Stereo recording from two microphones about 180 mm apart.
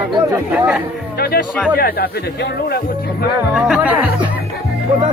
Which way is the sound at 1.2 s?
60° left (ahead or behind).